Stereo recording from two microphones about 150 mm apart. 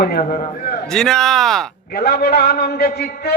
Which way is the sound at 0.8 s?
5° left (ahead or behind).